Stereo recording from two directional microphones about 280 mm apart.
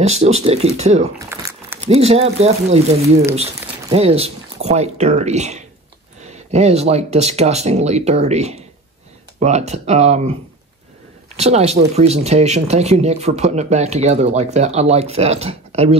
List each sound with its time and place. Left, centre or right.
0.0 s speech: right
11.3 s speech: right